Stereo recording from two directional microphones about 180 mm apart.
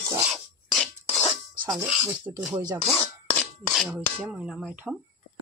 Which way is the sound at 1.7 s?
5° right (ahead or behind).